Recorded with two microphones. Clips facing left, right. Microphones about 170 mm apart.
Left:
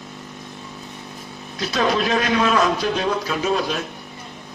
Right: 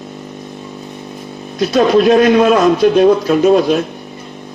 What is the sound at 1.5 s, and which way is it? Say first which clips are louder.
A man's voice: right 10 dB; 55° right (ahead or behind).